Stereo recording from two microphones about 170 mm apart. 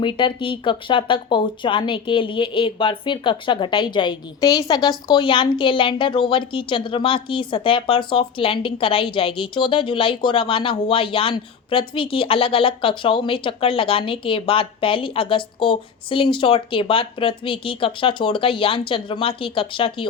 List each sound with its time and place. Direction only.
0.0 s speech: 30° left (ahead or behind)